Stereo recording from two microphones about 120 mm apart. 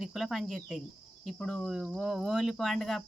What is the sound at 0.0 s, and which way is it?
Speech, centre (ahead or behind).